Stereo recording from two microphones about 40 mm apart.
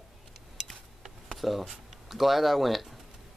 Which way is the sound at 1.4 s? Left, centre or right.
Centre.